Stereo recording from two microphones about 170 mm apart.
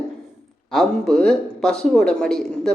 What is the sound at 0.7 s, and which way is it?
A woman's voice, centre (ahead or behind).